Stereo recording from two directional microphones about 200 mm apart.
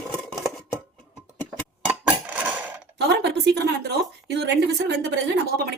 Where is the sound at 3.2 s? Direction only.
55° right (ahead or behind).